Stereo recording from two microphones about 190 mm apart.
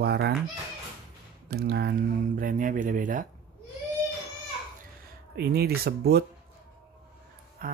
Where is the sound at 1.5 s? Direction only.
60° right (ahead or behind).